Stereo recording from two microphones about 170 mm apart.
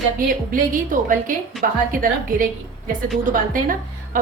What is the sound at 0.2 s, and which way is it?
A woman's voice, 55° right (ahead or behind).